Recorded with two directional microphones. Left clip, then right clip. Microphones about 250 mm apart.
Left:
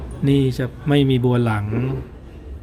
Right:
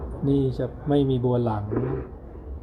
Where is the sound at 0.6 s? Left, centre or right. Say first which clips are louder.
Left 4 dB; left.